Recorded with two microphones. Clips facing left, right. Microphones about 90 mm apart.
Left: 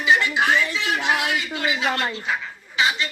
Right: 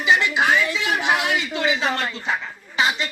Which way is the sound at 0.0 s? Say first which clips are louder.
Right 1 dB; 20° right (ahead or behind).